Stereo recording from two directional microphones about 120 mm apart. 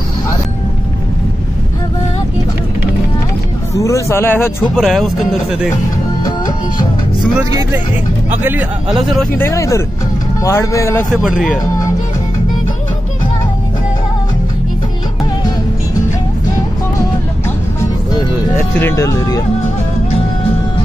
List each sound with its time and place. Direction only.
3.7 s speech: 25° left (ahead or behind)
4.7 s speech: centre (ahead or behind)
8.4 s speech: 20° right (ahead or behind)
8.9 s speech: centre (ahead or behind)
9.4 s speech: 25° left (ahead or behind)
11.1 s speech: centre (ahead or behind)
18.8 s speech: 20° left (ahead or behind)